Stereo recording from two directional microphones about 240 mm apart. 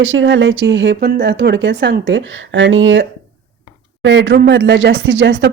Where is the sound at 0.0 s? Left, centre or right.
Right.